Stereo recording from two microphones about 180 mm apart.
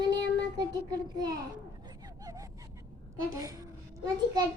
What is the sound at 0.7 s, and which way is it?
Speech, 20° right (ahead or behind).